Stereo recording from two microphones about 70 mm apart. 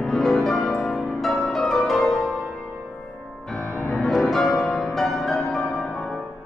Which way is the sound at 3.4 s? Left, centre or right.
Centre.